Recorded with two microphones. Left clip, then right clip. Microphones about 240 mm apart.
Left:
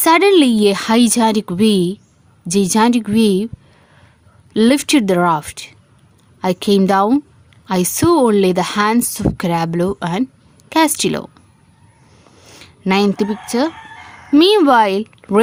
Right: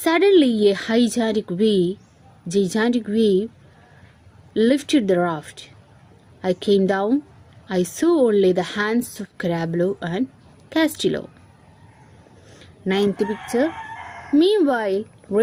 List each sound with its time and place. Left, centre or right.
0.0 s speech: left
4.5 s speech: left
12.5 s speech: left